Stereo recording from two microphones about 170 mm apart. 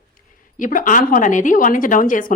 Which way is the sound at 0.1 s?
50° left (ahead or behind).